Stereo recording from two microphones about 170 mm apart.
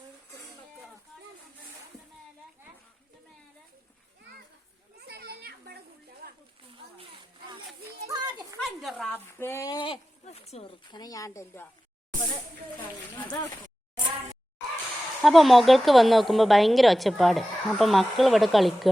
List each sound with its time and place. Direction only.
4.9 s children playing: 70° right (ahead or behind)
6.7 s a sound: 30° right (ahead or behind)
8.0 s children playing: 25° right (ahead or behind)
8.6 s a sound: centre (ahead or behind)
9.4 s speech: 15° left (ahead or behind)
9.9 s speech: 35° left (ahead or behind); by 11.7 s 15° left (ahead or behind)
15.2 s a woman's voice: centre (ahead or behind)